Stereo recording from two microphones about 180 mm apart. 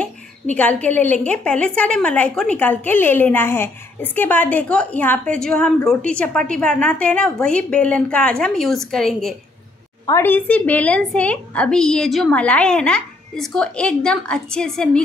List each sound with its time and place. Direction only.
0.6 s a woman's voice: 10° left (ahead or behind)
10.0 s a woman's voice: 15° left (ahead or behind)